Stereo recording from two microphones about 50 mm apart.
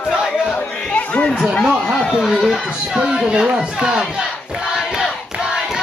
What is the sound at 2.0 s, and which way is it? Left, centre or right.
Speech, centre.